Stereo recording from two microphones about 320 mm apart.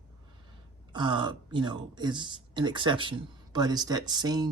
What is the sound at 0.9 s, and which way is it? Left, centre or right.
Speech, centre.